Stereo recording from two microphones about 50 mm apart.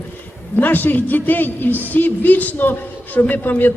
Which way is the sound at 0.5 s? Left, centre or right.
Left.